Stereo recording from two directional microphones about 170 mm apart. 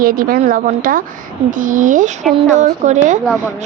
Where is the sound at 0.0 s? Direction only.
60° right (ahead or behind).